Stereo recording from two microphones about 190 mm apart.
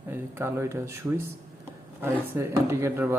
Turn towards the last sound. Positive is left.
turn(degrees=-15)  # may be behind; listen again after turning